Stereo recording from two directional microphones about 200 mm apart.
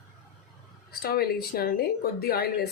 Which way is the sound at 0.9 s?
50° left (ahead or behind).